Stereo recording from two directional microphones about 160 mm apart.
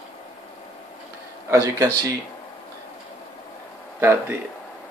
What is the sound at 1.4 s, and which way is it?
Speech, 15° right (ahead or behind).